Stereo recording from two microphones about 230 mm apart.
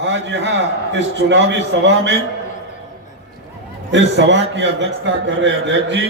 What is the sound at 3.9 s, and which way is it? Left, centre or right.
A man's voice, right.